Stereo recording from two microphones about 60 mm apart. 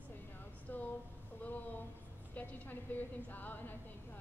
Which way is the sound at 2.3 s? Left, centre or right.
Left.